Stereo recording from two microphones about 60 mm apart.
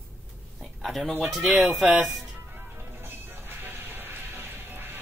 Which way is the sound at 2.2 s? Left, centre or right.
Right.